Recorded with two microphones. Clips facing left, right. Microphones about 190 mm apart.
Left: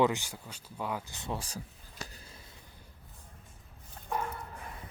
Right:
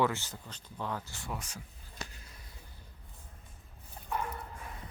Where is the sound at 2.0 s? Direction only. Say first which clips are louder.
Left 3 dB; 35° left (ahead or behind).